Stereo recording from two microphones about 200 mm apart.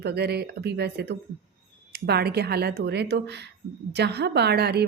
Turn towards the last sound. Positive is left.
turn(degrees=-55)  # may be behind; listen again after turning